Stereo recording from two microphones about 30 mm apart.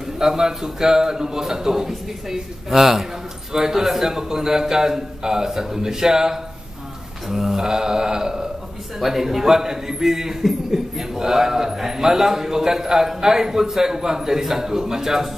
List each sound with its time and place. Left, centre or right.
0.2 s a man's voice: centre
9.0 s a man's voice: centre
10.4 s speech: centre
11.1 s a man's voice: centre